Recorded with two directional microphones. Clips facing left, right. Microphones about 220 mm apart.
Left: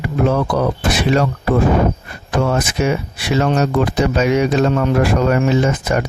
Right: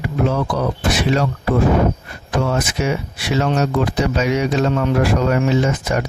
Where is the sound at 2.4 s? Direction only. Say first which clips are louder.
Left 3 dB; 55° left (ahead or behind).